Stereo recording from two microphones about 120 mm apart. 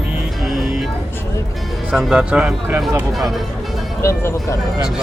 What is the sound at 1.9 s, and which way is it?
Speech, 5° right (ahead or behind).